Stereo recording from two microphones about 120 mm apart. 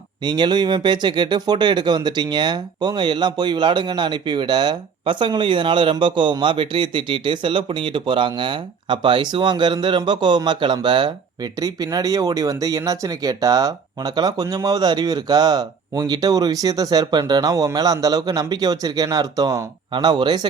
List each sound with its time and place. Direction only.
0.2 s speech: 40° right (ahead or behind)